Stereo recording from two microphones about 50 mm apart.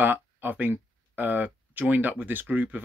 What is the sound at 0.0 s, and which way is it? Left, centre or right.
Speech, right.